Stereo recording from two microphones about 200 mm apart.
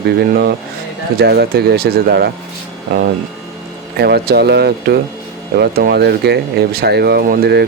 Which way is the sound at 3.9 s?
55° right (ahead or behind).